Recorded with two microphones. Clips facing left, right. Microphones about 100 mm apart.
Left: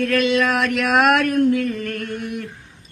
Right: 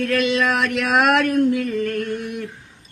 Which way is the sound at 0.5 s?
25° right (ahead or behind).